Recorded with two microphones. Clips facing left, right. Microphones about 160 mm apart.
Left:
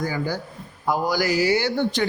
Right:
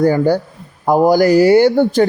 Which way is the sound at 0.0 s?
60° right (ahead or behind).